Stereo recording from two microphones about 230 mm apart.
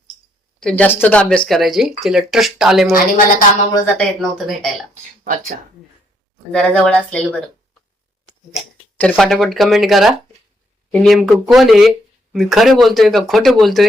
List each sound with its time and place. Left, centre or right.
0.6 s speech: centre
2.8 s a woman's voice: left
3.9 s speech: centre
6.5 s speech: centre
8.5 s speech: centre